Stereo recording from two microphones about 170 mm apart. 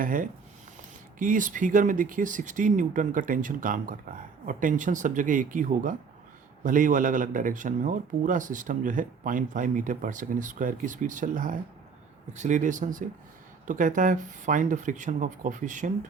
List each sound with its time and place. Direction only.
0.0 s speech: 55° right (ahead or behind)